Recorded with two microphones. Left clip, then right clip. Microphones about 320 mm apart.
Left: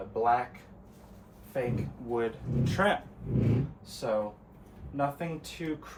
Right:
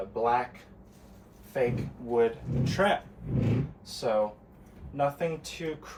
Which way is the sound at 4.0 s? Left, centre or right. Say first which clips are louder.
Right 3 dB; centre.